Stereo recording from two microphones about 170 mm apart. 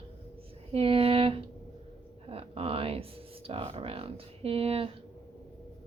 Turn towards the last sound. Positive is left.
turn(degrees=-35)  # may be behind; listen again after turning